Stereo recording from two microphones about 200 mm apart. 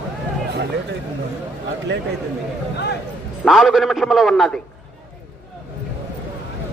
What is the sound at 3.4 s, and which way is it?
A man's voice, centre (ahead or behind).